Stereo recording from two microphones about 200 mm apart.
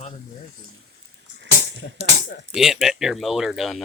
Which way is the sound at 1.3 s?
65° right (ahead or behind).